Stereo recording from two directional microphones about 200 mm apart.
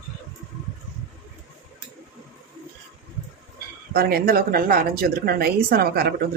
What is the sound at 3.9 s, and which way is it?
A woman's voice, 50° right (ahead or behind).